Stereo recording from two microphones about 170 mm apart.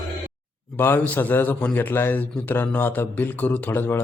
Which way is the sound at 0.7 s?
10° left (ahead or behind).